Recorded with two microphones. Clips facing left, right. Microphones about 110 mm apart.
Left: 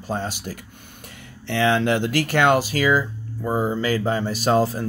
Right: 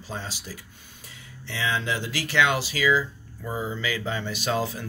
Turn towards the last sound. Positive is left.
turn(degrees=40)  # may be behind; listen again after turning